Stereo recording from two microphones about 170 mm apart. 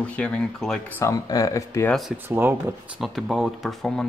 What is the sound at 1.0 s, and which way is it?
Speech, 20° left (ahead or behind).